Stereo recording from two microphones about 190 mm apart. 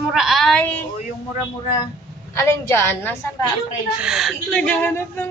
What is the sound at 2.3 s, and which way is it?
Speech, 15° left (ahead or behind).